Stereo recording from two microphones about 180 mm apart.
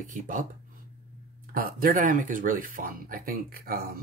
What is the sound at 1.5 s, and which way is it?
Speech, 55° right (ahead or behind).